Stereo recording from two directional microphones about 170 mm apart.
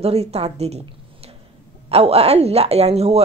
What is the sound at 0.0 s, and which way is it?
Speech, 35° right (ahead or behind).